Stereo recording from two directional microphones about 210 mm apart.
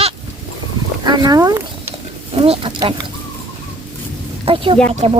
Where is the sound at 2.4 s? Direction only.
25° right (ahead or behind).